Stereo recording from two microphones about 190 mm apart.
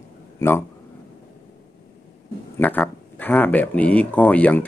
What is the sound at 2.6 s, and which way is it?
Speech, 10° left (ahead or behind).